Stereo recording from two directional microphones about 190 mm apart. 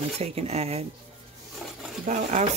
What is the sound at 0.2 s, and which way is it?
Speech, 35° right (ahead or behind).